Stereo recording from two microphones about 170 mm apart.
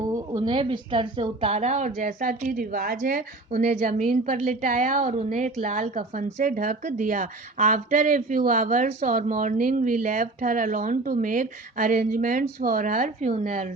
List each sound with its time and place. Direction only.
0.0 s a woman's voice: 25° right (ahead or behind); by 13.7 s 45° right (ahead or behind)